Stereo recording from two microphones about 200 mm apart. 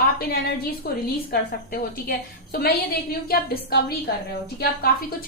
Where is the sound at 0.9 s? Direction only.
45° left (ahead or behind).